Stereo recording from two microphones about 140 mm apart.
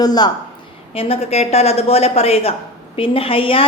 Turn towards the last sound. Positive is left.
turn(degrees=40)  # may be behind; listen again after turning